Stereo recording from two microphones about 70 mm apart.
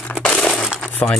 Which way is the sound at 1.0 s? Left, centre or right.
Left.